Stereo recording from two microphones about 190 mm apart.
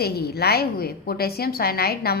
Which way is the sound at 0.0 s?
55° left (ahead or behind).